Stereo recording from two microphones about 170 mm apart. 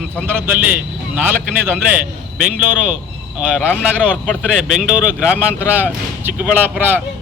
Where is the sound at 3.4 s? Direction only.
10° right (ahead or behind).